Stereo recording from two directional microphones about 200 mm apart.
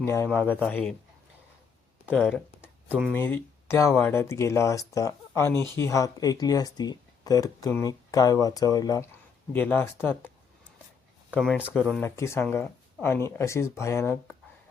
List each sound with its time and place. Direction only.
0.0 s speech: 10° left (ahead or behind)
2.1 s speech: centre (ahead or behind)
3.1 s speech: 10° left (ahead or behind)
11.3 s speech: 5° right (ahead or behind)
11.8 s speech: 5° left (ahead or behind)